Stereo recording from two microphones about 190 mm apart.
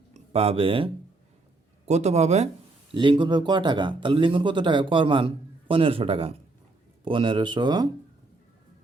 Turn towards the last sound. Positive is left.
turn(degrees=-25)  # may be behind; listen again after turning